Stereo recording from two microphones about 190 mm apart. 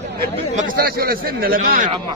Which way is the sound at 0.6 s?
50° right (ahead or behind).